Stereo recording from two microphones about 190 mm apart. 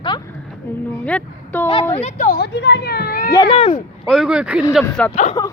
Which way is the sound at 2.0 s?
45° left (ahead or behind).